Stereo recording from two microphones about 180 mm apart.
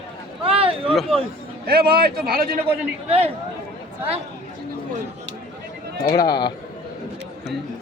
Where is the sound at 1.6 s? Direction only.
55° right (ahead or behind).